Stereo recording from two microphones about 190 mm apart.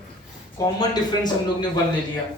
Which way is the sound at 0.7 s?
20° left (ahead or behind).